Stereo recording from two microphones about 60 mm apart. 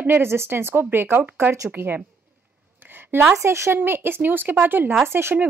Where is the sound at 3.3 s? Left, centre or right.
Right.